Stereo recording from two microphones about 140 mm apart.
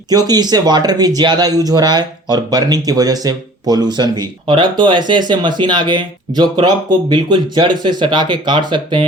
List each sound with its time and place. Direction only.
0.1 s speech: 30° right (ahead or behind)